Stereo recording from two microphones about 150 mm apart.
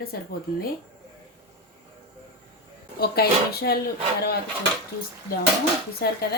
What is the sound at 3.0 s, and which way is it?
Speech, 90° left.